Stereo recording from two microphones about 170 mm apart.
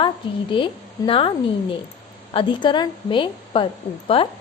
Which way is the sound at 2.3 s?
30° left (ahead or behind).